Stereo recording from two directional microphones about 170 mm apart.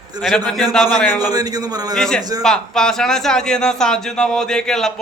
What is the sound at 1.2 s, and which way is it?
Speech, 20° right (ahead or behind).